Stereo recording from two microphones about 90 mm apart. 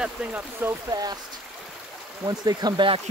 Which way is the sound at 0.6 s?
20° right (ahead or behind).